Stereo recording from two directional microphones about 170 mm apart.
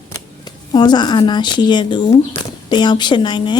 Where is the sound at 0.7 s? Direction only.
25° left (ahead or behind).